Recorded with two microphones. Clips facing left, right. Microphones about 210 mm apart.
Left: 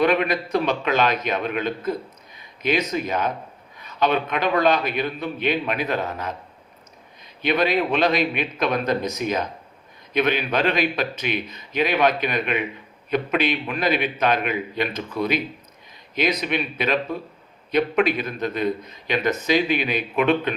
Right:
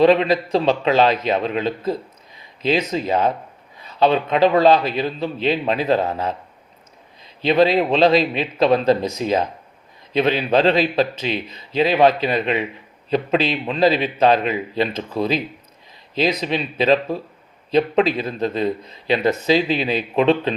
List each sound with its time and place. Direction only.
0.0 s a man's voice: 25° right (ahead or behind)
7.4 s speech: 30° right (ahead or behind)
16.4 s speech: 30° right (ahead or behind)